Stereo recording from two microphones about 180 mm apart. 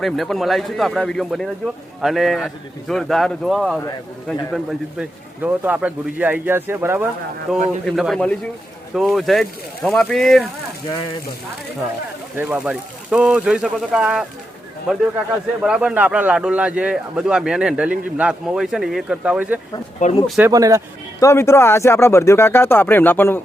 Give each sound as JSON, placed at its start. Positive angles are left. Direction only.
{"t": 0.0, "sound": "a man's voice", "side_deg": 0}
{"t": 12.4, "sound": "a man's voice", "side_deg": -10}
{"t": 15.6, "sound": "a man's voice", "side_deg": -5}
{"t": 20.0, "sound": "speech", "side_deg": 40}
{"t": 20.4, "sound": "a man's voice", "side_deg": -20}
{"t": 21.2, "sound": "speech", "side_deg": 15}